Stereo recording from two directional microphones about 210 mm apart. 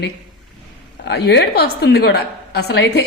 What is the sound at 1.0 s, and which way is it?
A woman's voice, 55° left (ahead or behind).